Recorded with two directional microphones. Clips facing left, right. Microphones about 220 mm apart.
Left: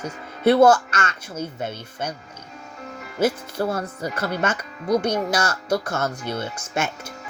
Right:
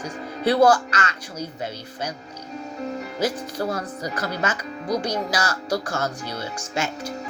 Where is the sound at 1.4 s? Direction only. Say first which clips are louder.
Left 2 dB; 55° left (ahead or behind).